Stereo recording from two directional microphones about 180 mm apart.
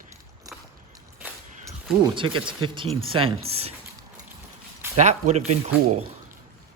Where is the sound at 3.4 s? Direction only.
35° right (ahead or behind).